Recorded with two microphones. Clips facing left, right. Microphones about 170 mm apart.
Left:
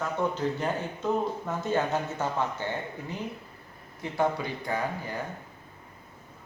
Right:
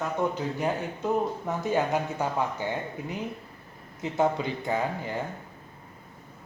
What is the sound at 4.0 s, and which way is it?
Speech, 20° right (ahead or behind).